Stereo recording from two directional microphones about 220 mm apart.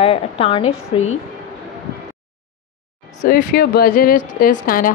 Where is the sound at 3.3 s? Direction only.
45° left (ahead or behind).